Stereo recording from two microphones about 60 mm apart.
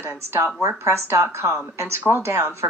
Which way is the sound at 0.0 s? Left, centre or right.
Right.